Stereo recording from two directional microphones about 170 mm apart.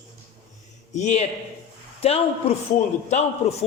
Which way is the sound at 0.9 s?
45° left (ahead or behind).